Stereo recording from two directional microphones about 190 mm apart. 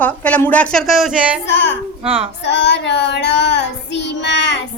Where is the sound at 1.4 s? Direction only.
65° left (ahead or behind).